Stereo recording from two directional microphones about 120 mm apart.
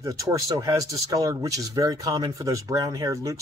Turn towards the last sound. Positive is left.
turn(degrees=-30)  # may be behind; listen again after turning